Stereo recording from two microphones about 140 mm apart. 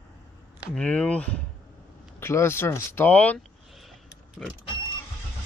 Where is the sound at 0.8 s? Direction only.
10° left (ahead or behind).